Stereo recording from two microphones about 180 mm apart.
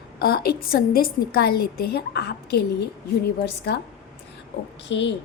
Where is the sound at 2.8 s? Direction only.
70° left (ahead or behind).